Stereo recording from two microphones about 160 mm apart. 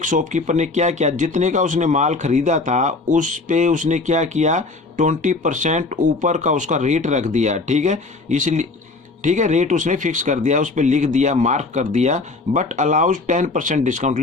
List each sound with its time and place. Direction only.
0.0 s speech: 55° right (ahead or behind)